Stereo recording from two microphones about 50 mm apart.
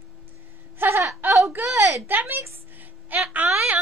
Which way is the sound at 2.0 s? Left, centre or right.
Right.